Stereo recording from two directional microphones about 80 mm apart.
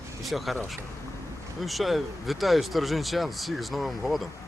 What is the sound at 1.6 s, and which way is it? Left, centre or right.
Speech, centre.